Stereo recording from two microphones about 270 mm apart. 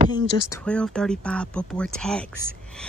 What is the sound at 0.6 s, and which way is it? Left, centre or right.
Speech, centre.